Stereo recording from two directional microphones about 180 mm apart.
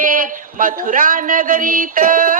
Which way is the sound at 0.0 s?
50° right (ahead or behind).